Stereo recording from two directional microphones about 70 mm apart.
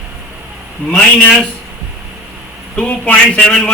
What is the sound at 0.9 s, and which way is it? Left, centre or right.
Speech, centre.